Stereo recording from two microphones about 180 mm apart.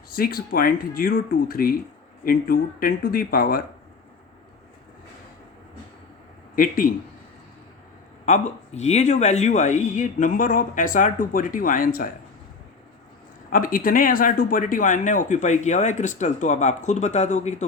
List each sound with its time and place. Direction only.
0.1 s speech: 55° left (ahead or behind)
6.6 s speech: 50° left (ahead or behind)
8.2 s speech: 40° left (ahead or behind)
13.5 s speech: 50° left (ahead or behind)